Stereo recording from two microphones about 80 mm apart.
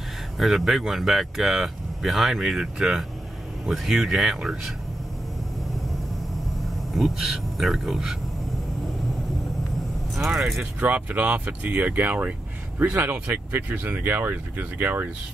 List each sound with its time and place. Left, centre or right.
0.4 s speech: centre
6.6 s speech: centre
10.1 s speech: centre
10.6 s speech: centre